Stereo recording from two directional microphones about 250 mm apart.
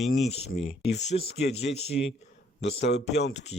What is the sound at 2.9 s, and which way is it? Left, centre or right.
Speech, left.